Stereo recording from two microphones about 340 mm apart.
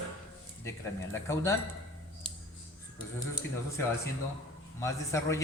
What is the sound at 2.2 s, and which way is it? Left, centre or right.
Scissors, centre.